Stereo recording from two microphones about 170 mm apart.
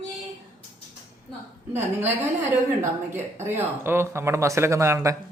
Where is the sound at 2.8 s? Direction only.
15° right (ahead or behind).